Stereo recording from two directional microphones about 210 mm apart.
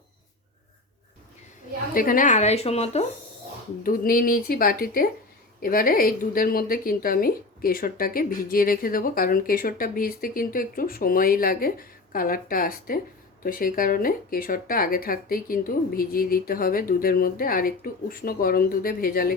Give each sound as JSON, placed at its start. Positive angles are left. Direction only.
{"t": 1.9, "sound": "speech", "side_deg": 40}
{"t": 3.8, "sound": "a woman's voice", "side_deg": 40}